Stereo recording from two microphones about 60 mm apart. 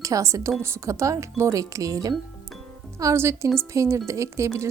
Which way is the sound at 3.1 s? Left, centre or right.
Right.